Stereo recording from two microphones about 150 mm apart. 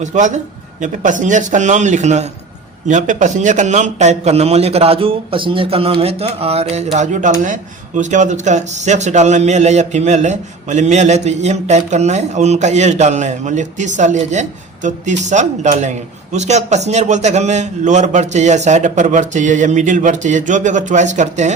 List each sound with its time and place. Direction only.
0.0 s a man's voice: 55° right (ahead or behind)
6.9 s speech: 55° right (ahead or behind)